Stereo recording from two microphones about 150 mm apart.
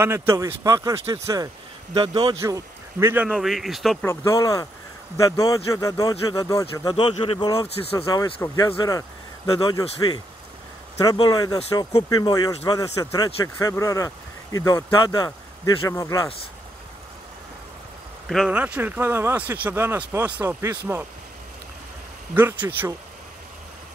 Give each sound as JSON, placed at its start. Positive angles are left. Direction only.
{"t": 0.0, "sound": "speech", "side_deg": -15}
{"t": 4.0, "sound": "speech", "side_deg": 20}
{"t": 18.3, "sound": "speech", "side_deg": 0}
{"t": 18.6, "sound": "speech", "side_deg": -10}
{"t": 22.3, "sound": "speech", "side_deg": -10}